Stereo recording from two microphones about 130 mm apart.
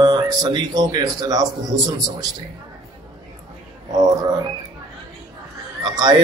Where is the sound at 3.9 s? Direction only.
30° right (ahead or behind).